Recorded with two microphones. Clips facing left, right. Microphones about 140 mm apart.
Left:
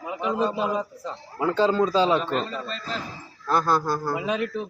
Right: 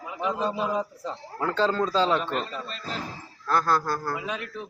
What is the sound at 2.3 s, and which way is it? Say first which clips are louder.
Speech: left 3 dB; 30° left (ahead or behind).